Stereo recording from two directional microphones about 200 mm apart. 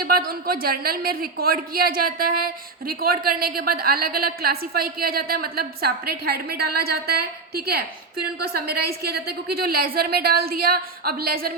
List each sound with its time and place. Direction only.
0.0 s a man's voice: 45° right (ahead or behind)